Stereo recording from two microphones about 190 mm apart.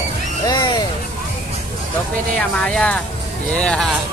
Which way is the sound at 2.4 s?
5° left (ahead or behind).